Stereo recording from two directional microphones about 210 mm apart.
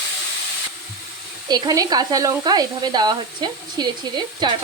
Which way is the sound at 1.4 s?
20° right (ahead or behind).